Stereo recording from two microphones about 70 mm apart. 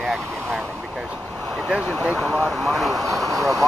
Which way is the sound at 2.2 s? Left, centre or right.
Centre.